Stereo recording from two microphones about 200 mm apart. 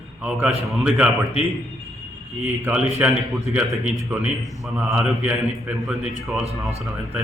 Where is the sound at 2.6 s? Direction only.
10° right (ahead or behind).